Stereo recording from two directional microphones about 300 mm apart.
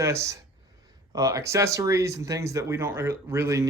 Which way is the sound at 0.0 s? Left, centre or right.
Centre.